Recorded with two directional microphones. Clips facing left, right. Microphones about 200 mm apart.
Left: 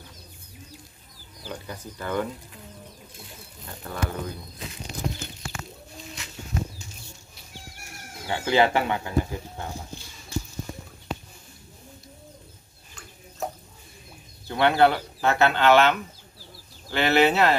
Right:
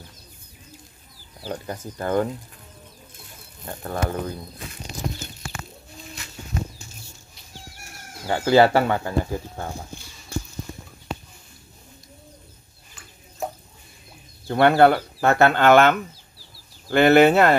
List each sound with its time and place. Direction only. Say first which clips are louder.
1.4 s speech: right 5 dB; 45° right (ahead or behind)
3.6 s speech: right 5 dB; 45° right (ahead or behind)
8.3 s speech: right 5 dB; 40° right (ahead or behind)
14.5 s speech: right 4 dB; 45° right (ahead or behind)